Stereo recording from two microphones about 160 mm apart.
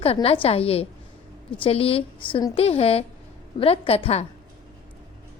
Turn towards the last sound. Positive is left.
turn(degrees=40)  # may be behind; listen again after turning